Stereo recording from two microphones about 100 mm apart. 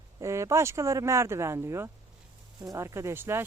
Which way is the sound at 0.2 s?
30° right (ahead or behind).